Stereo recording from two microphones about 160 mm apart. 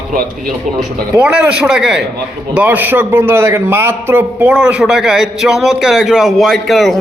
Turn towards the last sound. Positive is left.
turn(degrees=0)  # may be behind; listen again after turning